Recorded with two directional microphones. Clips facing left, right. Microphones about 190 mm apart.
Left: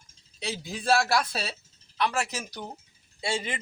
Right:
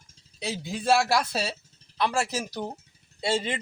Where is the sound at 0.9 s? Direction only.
10° right (ahead or behind).